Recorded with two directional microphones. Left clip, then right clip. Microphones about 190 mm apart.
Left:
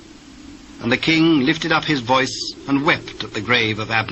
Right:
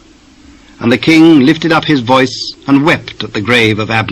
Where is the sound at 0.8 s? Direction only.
40° right (ahead or behind).